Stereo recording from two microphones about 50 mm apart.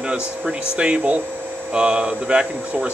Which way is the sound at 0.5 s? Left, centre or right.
Right.